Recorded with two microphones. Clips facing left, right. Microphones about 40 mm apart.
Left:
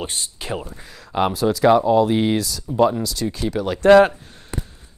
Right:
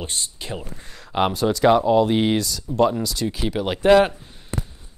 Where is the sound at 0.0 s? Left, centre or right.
Left.